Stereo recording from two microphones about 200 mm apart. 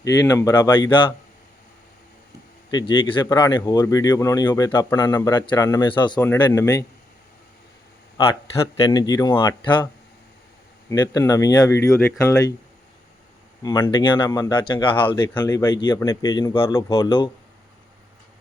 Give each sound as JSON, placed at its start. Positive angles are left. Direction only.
{"t": 0.0, "sound": "speech", "side_deg": 15}
{"t": 2.6, "sound": "speech", "side_deg": 25}
{"t": 6.2, "sound": "speech", "side_deg": 10}
{"t": 8.9, "sound": "speech", "side_deg": 20}
{"t": 13.6, "sound": "speech", "side_deg": 15}
{"t": 15.3, "sound": "speech", "side_deg": 10}
{"t": 16.9, "sound": "speech", "side_deg": 25}